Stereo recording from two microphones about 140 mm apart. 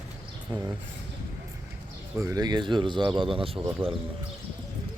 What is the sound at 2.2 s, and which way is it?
Speech, 25° right (ahead or behind).